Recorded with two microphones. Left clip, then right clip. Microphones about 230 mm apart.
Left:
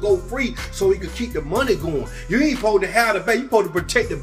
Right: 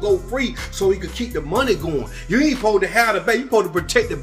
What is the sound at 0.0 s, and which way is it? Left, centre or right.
Speech, centre.